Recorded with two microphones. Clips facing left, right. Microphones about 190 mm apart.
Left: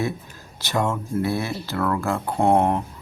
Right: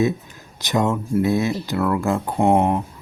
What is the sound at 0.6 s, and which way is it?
Speech, 20° right (ahead or behind).